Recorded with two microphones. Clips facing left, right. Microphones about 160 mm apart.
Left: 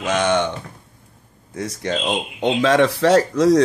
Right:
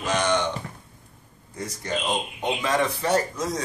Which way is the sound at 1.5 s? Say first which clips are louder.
Left 5 dB; 85° left.